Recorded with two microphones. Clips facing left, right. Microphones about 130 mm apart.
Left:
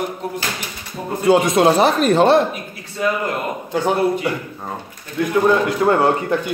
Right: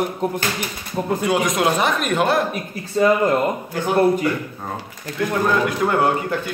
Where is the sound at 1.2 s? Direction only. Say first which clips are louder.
Left 7 dB; 30° left (ahead or behind).